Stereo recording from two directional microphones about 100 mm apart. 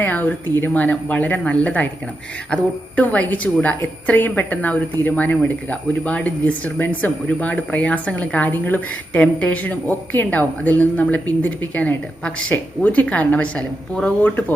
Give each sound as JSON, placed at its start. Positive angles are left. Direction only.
{"t": 0.0, "sound": "a woman's voice", "side_deg": 20}